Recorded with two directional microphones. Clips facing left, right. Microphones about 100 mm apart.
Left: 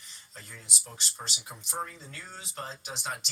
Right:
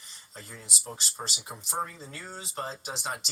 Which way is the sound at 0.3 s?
35° right (ahead or behind).